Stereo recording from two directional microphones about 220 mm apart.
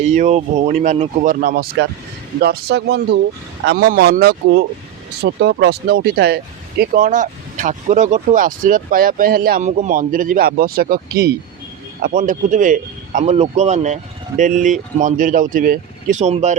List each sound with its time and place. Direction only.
0.0 s speech: 30° right (ahead or behind)